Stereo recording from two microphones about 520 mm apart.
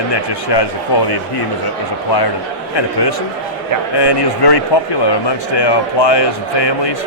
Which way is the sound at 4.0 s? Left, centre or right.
Left.